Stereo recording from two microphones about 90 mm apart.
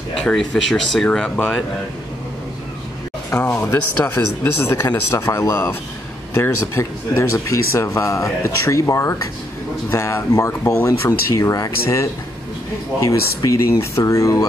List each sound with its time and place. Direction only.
0.2 s speech: 5° left (ahead or behind)
3.3 s speech: 20° left (ahead or behind); by 14.4 s 40° left (ahead or behind)